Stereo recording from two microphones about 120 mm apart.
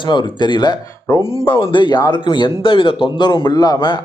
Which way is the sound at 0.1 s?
40° left (ahead or behind).